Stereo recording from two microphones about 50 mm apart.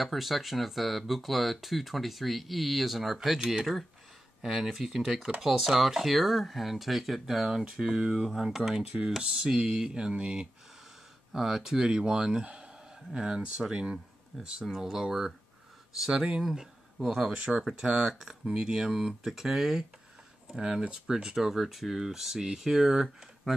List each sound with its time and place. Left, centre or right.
0.0 s speech: centre
11.3 s speech: centre
14.3 s speech: centre
17.3 s speech: right
17.9 s speech: centre